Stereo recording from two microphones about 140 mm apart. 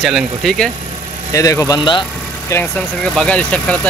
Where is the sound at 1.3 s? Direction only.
25° left (ahead or behind).